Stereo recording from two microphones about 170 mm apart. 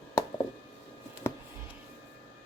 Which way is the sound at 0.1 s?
10° left (ahead or behind).